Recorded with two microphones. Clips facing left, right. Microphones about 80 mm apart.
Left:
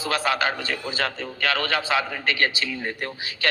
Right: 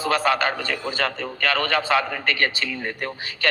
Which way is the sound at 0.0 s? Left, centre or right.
Right.